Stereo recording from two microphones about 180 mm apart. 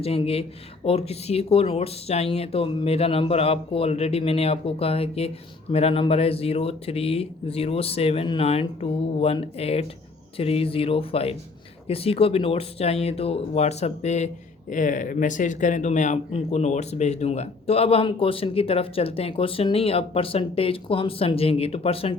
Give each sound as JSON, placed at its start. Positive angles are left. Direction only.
{"t": 0.0, "sound": "speech", "side_deg": 35}